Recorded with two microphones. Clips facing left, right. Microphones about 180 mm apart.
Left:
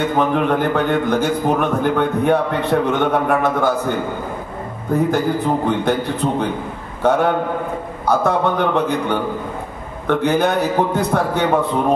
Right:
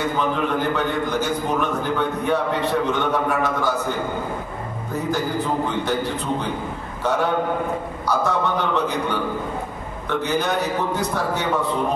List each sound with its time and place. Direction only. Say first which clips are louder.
0.2 s a man's voice: left 7 dB; 55° left (ahead or behind)
4.9 s a man's voice: left 6 dB; 55° left (ahead or behind)
7.0 s a man's voice: left 5 dB; 60° left (ahead or behind)